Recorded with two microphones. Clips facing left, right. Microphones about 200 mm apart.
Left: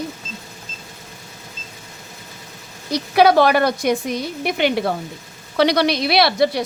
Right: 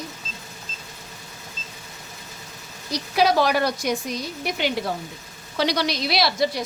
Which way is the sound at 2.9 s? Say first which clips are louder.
Left 6 dB; 60° left (ahead or behind).